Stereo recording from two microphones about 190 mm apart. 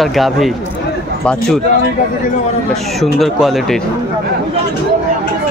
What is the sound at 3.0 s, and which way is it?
Speech, centre (ahead or behind).